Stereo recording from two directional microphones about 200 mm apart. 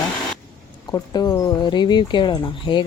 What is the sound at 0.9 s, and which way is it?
Speech, 20° left (ahead or behind).